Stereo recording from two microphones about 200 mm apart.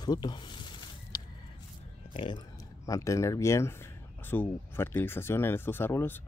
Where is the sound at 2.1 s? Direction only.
25° left (ahead or behind).